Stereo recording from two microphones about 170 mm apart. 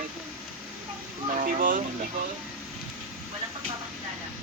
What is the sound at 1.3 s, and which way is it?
Speech, 55° right (ahead or behind).